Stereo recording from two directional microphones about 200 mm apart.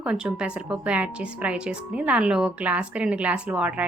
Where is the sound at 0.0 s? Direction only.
5° right (ahead or behind).